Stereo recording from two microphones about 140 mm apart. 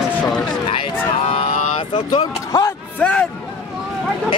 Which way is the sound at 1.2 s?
45° left (ahead or behind).